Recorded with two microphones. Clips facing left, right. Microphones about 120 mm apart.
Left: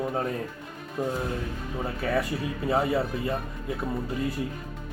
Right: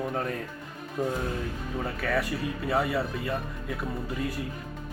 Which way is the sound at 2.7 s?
25° left (ahead or behind).